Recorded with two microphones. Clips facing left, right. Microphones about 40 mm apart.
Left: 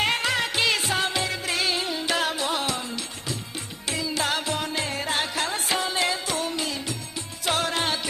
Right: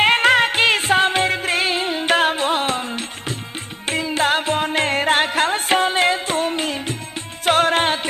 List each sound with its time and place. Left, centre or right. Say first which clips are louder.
0.0 s music: right 10 dB; right